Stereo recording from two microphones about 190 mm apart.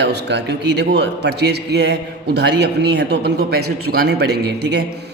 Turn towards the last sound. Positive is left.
turn(degrees=-60)  # may be behind; listen again after turning